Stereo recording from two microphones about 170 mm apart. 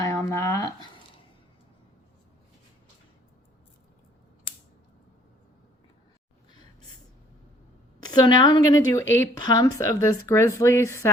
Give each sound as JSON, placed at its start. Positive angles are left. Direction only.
{"t": 0.0, "sound": "speech", "side_deg": 15}
{"t": 8.0, "sound": "a woman's voice", "side_deg": 25}